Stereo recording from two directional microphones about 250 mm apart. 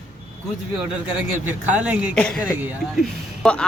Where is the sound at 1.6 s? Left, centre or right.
Centre.